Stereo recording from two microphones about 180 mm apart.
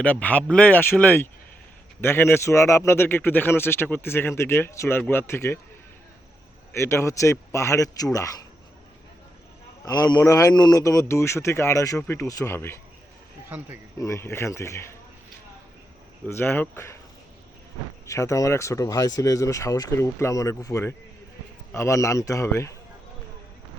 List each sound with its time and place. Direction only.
0.0 s speech: 10° left (ahead or behind)
6.7 s speech: 15° left (ahead or behind)
9.8 s speech: 20° left (ahead or behind)
14.0 s speech: 15° left (ahead or behind)
16.2 s speech: 10° left (ahead or behind)
18.0 s speech: 15° left (ahead or behind)